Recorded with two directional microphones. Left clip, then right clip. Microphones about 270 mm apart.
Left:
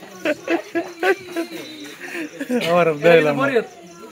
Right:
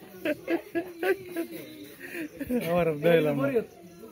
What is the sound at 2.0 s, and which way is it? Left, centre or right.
Speech, centre.